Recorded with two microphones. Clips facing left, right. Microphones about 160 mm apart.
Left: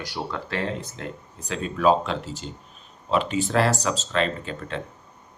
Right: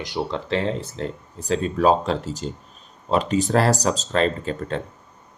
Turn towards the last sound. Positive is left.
turn(degrees=-40)  # may be behind; listen again after turning